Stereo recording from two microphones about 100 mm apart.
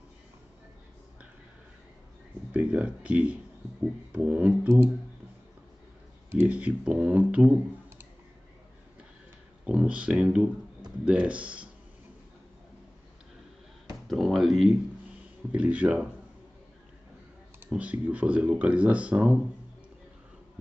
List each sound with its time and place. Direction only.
2.5 s speech: 10° right (ahead or behind)
6.3 s speech: 15° right (ahead or behind)
9.7 s speech: 10° right (ahead or behind)
14.0 s speech: centre (ahead or behind)
15.1 s speech: 15° right (ahead or behind)
17.6 s speech: 15° right (ahead or behind)